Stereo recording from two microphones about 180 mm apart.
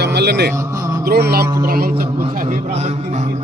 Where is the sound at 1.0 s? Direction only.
60° right (ahead or behind).